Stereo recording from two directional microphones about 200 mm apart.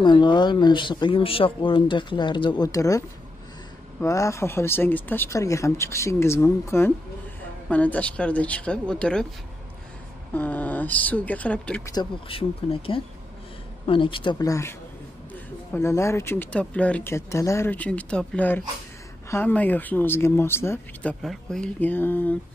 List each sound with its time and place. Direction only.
0.0 s speech: 25° left (ahead or behind); by 9.3 s 5° left (ahead or behind)
10.3 s speech: 10° left (ahead or behind)
11.9 s speech: 25° left (ahead or behind)